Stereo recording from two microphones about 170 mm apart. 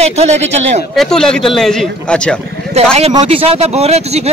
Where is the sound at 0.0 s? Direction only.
40° right (ahead or behind).